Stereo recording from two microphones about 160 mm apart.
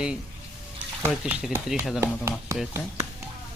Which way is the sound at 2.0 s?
15° right (ahead or behind).